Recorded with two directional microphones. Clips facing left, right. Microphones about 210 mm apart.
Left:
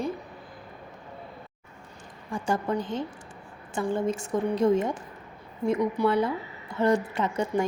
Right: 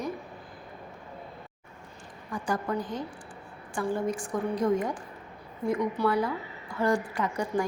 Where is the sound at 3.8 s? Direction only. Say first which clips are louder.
Left 2 dB; 25° left (ahead or behind).